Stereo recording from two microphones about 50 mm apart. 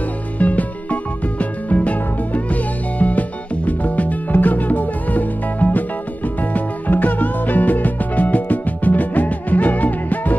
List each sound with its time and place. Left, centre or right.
0.4 s music: left